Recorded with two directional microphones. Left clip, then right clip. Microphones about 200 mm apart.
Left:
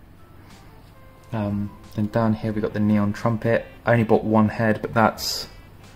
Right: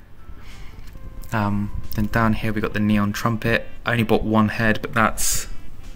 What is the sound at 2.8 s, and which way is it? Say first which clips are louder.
Speech: right 1 dB; 30° right (ahead or behind).